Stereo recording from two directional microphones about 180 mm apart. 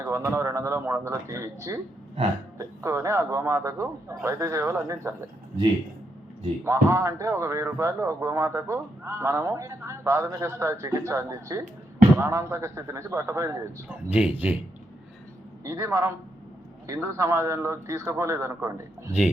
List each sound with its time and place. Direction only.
0.0 s speech: 15° right (ahead or behind)
6.7 s speech: 15° right (ahead or behind)
15.6 s speech: 15° right (ahead or behind)